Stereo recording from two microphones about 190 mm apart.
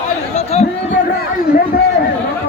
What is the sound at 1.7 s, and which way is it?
Chatter, 45° left (ahead or behind).